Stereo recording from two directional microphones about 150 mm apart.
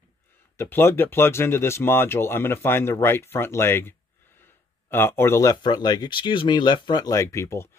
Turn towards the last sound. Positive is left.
turn(degrees=20)  # may be behind; listen again after turning